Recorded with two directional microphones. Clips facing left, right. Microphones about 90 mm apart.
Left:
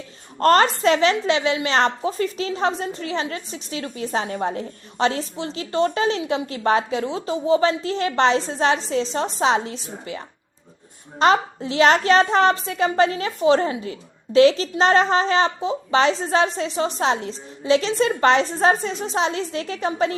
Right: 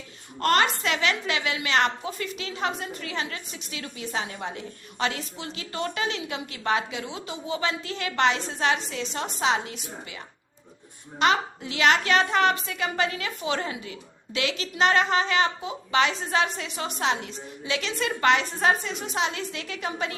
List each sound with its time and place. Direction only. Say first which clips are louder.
0.3 s a woman's voice: left 7 dB; 35° left (ahead or behind)